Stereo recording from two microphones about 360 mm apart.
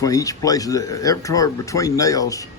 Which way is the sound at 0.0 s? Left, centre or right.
Centre.